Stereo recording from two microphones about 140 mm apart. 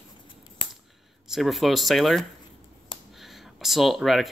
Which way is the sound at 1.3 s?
Centre (ahead or behind).